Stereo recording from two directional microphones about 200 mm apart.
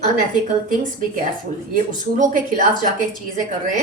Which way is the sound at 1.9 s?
40° right (ahead or behind).